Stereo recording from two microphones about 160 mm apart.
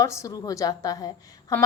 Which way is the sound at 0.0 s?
20° left (ahead or behind).